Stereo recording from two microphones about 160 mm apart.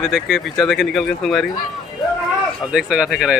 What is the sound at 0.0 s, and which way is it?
Speech, centre (ahead or behind).